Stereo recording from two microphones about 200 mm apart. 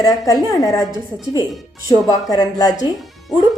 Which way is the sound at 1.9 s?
20° left (ahead or behind).